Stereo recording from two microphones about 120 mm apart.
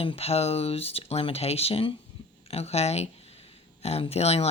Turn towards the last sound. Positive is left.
turn(degrees=60)  # may be behind; listen again after turning